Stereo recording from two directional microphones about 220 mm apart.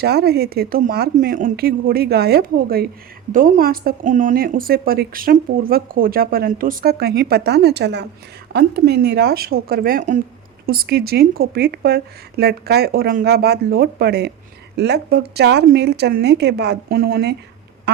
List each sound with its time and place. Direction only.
0.0 s a woman's voice: 45° right (ahead or behind)